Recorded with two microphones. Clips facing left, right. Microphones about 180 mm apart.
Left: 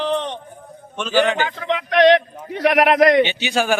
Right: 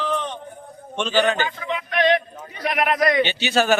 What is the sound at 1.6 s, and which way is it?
A man's voice, 75° left (ahead or behind).